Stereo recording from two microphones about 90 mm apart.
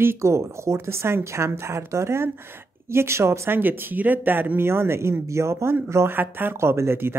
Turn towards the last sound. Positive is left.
turn(degrees=-25)  # may be behind; listen again after turning